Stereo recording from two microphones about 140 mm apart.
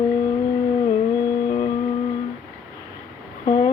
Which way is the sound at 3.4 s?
35° left (ahead or behind).